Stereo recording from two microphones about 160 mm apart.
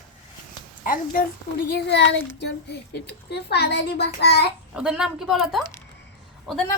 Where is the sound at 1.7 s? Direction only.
90° left.